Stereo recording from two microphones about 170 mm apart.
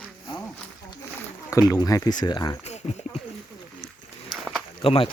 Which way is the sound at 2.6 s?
40° left (ahead or behind).